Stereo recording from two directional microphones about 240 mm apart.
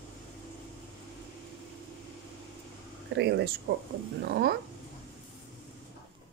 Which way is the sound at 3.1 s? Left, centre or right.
Right.